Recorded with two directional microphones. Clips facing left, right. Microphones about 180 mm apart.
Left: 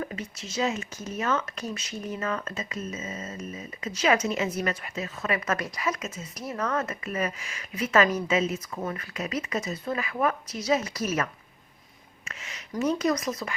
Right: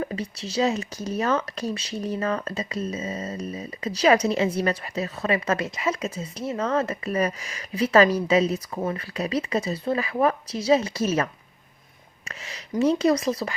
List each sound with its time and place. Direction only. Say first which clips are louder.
0.0 s speech: right 5 dB; 35° right (ahead or behind)
12.7 s speech: right 5 dB; 30° right (ahead or behind)